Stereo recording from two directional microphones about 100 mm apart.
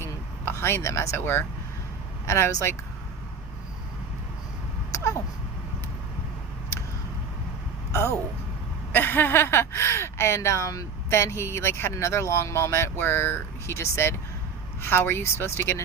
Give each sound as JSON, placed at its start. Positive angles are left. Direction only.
{"t": 0.0, "sound": "vehicle", "side_deg": 25}
{"t": 2.2, "sound": "speech", "side_deg": 30}
{"t": 4.9, "sound": "a sound", "side_deg": 30}
{"t": 7.9, "sound": "speech", "side_deg": 25}